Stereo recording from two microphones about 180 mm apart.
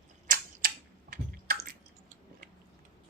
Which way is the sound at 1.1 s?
55° right (ahead or behind).